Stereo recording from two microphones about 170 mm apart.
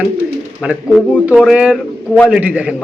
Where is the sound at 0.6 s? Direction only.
5° right (ahead or behind).